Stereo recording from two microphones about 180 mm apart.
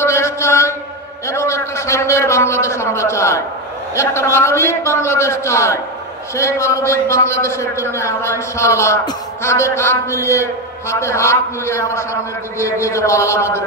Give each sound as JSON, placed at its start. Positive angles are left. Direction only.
{"t": 0.0, "sound": "mantra", "side_deg": 15}
{"t": 1.2, "sound": "a man's voice", "side_deg": 15}